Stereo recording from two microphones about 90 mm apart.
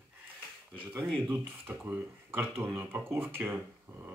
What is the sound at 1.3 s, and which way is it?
Speech, 20° right (ahead or behind).